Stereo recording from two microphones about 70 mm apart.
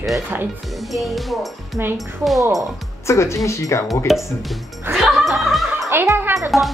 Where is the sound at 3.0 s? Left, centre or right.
Left.